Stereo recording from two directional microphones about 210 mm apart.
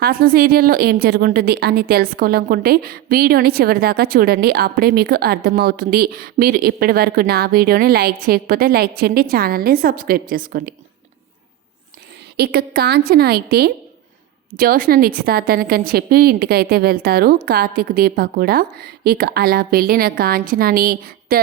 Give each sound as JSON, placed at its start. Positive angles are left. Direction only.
{"t": 0.0, "sound": "a woman's voice", "side_deg": -45}
{"t": 12.4, "sound": "a woman's voice", "side_deg": -50}